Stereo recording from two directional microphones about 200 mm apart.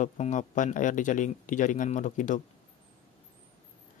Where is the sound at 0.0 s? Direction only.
40° left (ahead or behind).